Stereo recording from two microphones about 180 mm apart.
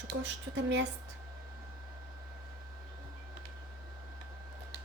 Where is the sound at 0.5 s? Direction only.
90° right.